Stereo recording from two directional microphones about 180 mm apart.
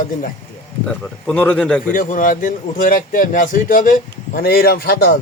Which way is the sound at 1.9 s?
45° left (ahead or behind).